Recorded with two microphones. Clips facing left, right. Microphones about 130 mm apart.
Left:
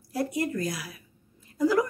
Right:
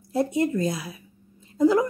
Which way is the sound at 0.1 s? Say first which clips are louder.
Right 5 dB; 25° right (ahead or behind).